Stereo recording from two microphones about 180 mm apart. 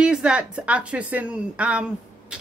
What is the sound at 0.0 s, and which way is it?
A woman's voice, 5° right (ahead or behind).